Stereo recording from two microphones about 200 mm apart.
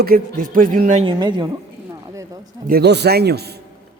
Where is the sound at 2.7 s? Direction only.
55° right (ahead or behind).